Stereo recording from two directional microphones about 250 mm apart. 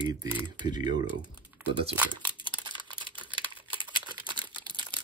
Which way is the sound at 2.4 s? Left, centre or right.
Centre.